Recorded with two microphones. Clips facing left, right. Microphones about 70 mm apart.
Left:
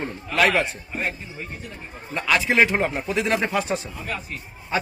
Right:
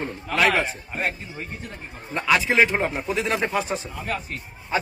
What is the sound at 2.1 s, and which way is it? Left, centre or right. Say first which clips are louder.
A man's voice: even; centre.